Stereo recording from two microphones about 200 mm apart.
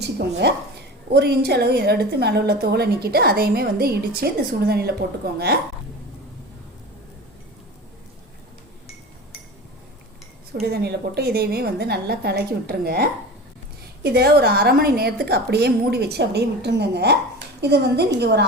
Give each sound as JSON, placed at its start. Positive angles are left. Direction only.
{"t": 0.0, "sound": "a woman's voice", "side_deg": -55}
{"t": 10.6, "sound": "a woman's voice", "side_deg": -50}